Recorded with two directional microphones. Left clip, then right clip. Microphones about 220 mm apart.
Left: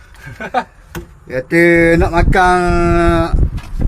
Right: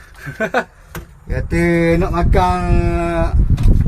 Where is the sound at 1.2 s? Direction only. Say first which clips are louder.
Left 7 dB; 20° left (ahead or behind).